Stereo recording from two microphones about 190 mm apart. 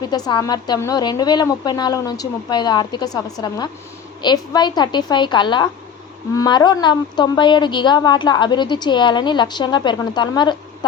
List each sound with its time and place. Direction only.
0.0 s a woman's voice: 20° left (ahead or behind)